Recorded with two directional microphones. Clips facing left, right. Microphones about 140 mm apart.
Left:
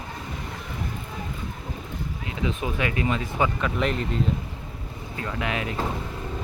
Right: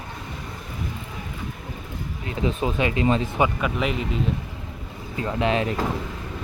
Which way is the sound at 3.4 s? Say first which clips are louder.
Right 2 dB; 10° right (ahead or behind).